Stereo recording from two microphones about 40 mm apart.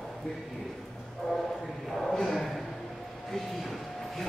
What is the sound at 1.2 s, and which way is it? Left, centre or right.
Speech, centre.